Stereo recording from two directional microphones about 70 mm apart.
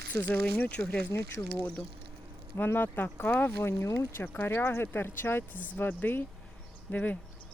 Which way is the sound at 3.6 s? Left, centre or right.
Left.